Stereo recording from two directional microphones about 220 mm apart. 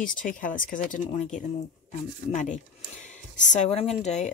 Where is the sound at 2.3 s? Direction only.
35° left (ahead or behind).